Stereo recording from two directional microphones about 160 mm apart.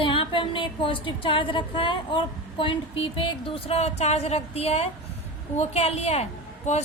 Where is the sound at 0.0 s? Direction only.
30° left (ahead or behind).